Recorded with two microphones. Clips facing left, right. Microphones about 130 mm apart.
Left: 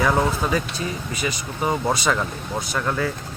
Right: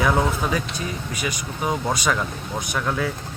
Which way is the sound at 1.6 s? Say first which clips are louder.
Left 2 dB; 5° left (ahead or behind).